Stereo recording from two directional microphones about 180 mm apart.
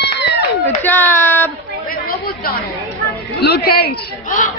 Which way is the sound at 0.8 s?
10° left (ahead or behind).